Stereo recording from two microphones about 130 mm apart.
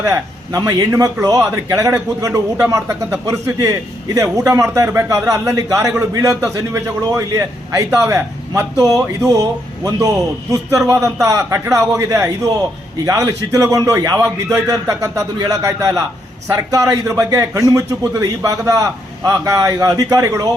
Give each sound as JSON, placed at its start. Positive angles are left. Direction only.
{"t": 0.0, "sound": "a man's voice", "side_deg": -25}